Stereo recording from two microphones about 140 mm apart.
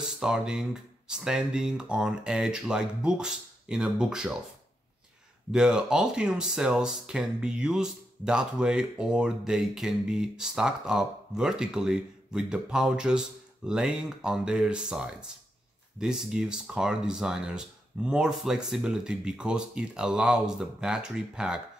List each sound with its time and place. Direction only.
0.2 s speech: 5° right (ahead or behind)
5.5 s speech: 5° right (ahead or behind)